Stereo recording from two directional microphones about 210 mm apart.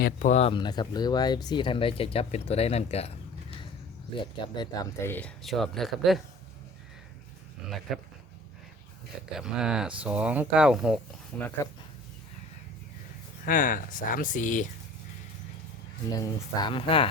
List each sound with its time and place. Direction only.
0.0 s speech: 35° left (ahead or behind)
4.2 s speech: 20° left (ahead or behind); by 6.2 s centre (ahead or behind)
7.9 s speech: centre (ahead or behind)
9.3 s speech: 5° right (ahead or behind)
13.4 s speech: 40° left (ahead or behind)
16.0 s speech: 15° left (ahead or behind)